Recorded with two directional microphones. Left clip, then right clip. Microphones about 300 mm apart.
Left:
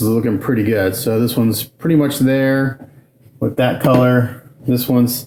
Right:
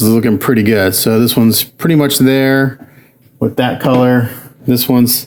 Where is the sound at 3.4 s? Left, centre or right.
Right.